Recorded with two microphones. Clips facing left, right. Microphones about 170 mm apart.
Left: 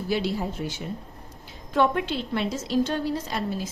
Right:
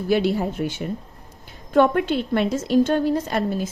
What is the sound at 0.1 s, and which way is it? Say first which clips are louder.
A woman's voice: right 7 dB; 60° right (ahead or behind).